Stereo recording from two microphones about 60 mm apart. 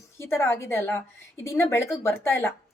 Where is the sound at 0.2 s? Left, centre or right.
Left.